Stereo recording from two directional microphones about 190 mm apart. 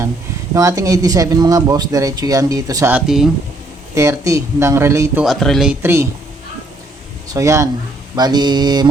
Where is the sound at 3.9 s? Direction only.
15° right (ahead or behind).